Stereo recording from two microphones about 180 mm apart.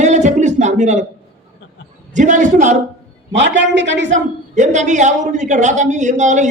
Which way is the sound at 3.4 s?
90° right.